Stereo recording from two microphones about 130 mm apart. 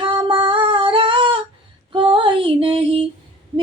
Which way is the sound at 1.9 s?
40° right (ahead or behind).